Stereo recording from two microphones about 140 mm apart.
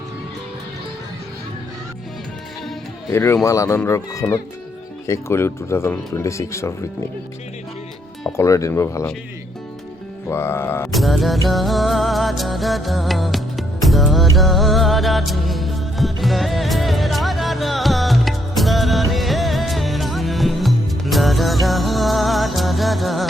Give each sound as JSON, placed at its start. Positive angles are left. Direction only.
{"t": 3.1, "sound": "speech", "side_deg": 20}
{"t": 8.3, "sound": "speech", "side_deg": 20}
{"t": 10.2, "sound": "music", "side_deg": 15}
{"t": 10.9, "sound": "music", "side_deg": 0}